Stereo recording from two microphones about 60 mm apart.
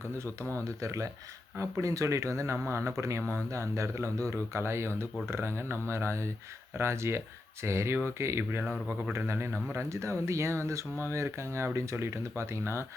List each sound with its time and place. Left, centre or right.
0.2 s speech: right